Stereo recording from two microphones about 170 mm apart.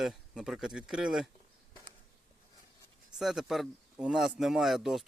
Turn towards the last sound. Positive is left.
turn(degrees=0)  # may be behind; listen again after turning